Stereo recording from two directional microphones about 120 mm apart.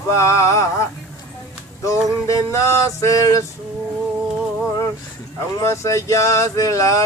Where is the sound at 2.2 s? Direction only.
25° left (ahead or behind).